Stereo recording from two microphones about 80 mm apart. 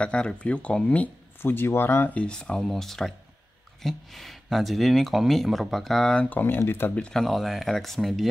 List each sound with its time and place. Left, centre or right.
0.0 s speech: centre; by 2.1 s left
2.1 s speech: centre
6.2 s speech: left
7.0 s speech: centre